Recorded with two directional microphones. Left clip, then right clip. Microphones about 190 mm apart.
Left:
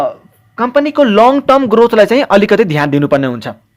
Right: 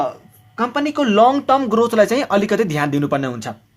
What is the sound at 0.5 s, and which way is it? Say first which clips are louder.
Speech: left 8 dB; 35° left (ahead or behind).